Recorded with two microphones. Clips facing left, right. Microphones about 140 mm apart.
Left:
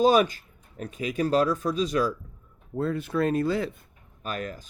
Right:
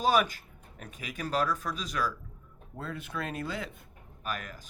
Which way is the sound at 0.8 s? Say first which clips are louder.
Left 11 dB; 30° left (ahead or behind).